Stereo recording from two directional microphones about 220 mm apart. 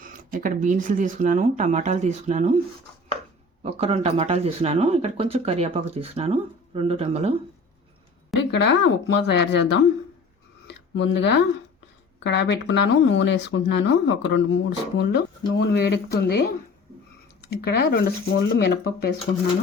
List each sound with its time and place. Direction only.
0.3 s speech: 35° right (ahead or behind)
3.6 s speech: 25° right (ahead or behind)
8.4 s speech: 50° left (ahead or behind)
10.7 s a sound: 55° left (ahead or behind)
12.2 s speech: 50° left (ahead or behind)
17.7 s speech: 50° left (ahead or behind)